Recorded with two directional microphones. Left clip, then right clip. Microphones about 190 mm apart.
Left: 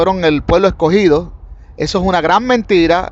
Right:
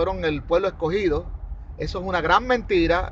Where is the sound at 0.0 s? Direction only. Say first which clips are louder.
Left 11 dB; 50° left (ahead or behind).